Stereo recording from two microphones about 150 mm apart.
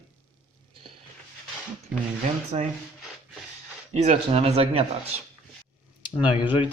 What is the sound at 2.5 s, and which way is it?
Speech, 45° right (ahead or behind).